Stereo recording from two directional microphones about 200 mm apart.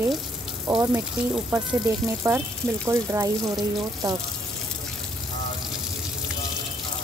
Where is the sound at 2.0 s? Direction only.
15° right (ahead or behind).